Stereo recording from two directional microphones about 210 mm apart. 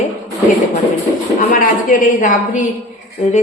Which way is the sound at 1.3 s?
35° left (ahead or behind).